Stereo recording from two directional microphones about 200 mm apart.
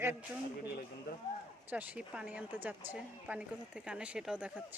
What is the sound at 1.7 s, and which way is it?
A woman's voice, 10° right (ahead or behind).